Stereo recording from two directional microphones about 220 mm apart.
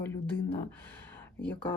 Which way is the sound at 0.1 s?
10° left (ahead or behind).